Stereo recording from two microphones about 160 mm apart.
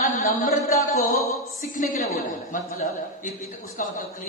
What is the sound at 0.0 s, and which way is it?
A man's voice, 55° left (ahead or behind).